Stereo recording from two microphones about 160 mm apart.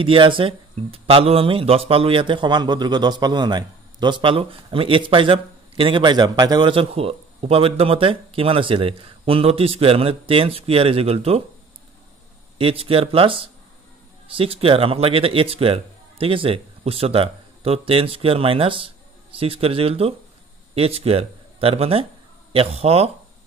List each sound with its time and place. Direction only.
0.0 s speech: 30° right (ahead or behind)
12.5 s speech: 35° right (ahead or behind)